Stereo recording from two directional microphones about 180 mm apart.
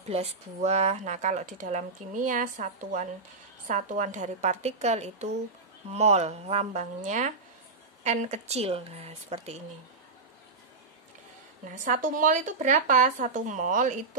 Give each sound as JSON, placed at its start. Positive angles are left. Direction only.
{"t": 0.1, "sound": "speech", "side_deg": -35}
{"t": 11.7, "sound": "speech", "side_deg": -45}